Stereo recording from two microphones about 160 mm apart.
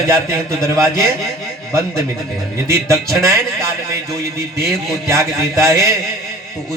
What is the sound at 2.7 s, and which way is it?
Speech, 20° right (ahead or behind).